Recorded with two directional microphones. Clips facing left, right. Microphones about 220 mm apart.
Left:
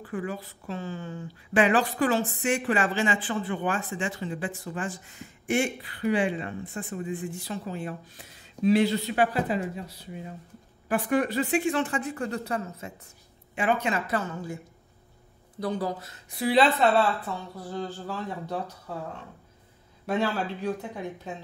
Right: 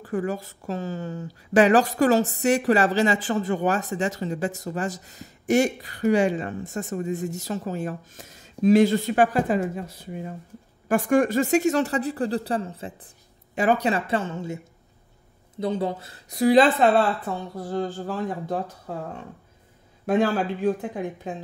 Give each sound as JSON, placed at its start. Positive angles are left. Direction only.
{"t": 0.0, "sound": "a woman's voice", "side_deg": -45}
{"t": 16.3, "sound": "a woman's voice", "side_deg": -45}
{"t": 20.1, "sound": "a woman's voice", "side_deg": -50}